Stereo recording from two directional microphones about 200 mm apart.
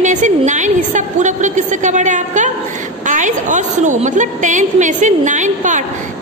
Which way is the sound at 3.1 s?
40° right (ahead or behind).